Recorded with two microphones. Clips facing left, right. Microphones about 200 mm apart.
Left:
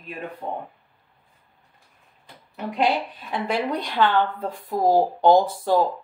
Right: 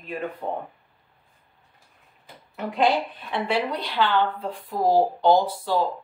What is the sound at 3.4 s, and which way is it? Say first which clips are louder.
Speech: left 1 dB; 45° left (ahead or behind).